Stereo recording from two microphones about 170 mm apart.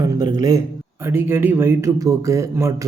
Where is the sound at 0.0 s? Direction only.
20° right (ahead or behind).